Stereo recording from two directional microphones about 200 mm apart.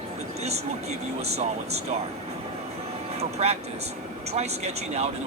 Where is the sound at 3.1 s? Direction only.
30° right (ahead or behind).